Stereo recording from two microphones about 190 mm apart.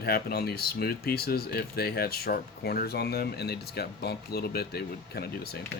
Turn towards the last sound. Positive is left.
turn(degrees=55)  # may be behind; listen again after turning